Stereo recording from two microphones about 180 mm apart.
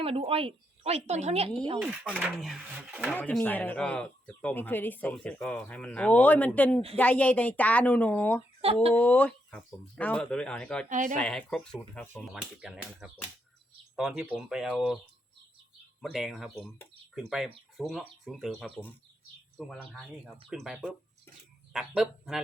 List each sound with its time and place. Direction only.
0.0 s a woman's voice: 30° right (ahead or behind)
1.8 s speech: 5° right (ahead or behind); by 8.4 s 10° left (ahead or behind)
8.6 s a woman's voice: 35° right (ahead or behind)
9.0 s speech: 5° left (ahead or behind)
10.8 s speech: 45° right (ahead or behind)
11.1 s speech: 5° left (ahead or behind)
12.2 s speech: centre (ahead or behind)
16.0 s speech: centre (ahead or behind)
18.6 s speech: 10° left (ahead or behind)
19.5 s speech: 5° right (ahead or behind)